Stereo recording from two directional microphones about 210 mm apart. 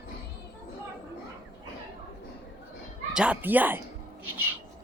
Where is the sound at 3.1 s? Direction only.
5° right (ahead or behind).